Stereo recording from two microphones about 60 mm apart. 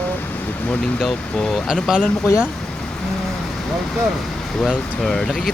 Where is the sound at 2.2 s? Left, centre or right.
Left.